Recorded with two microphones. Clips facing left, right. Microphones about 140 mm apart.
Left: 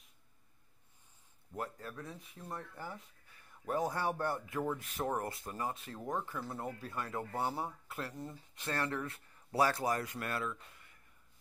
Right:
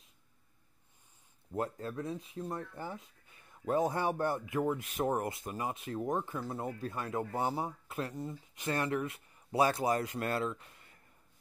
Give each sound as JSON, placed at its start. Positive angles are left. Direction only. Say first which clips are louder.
{"t": 1.5, "sound": "speech", "louder": "right 6 dB", "side_deg": -25}